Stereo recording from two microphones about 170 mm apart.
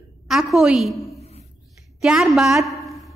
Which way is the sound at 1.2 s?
40° left (ahead or behind).